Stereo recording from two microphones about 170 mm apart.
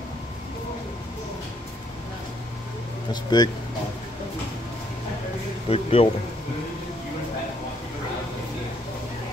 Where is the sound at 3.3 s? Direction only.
25° left (ahead or behind).